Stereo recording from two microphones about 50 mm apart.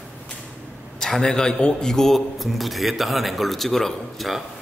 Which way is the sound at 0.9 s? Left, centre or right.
Centre.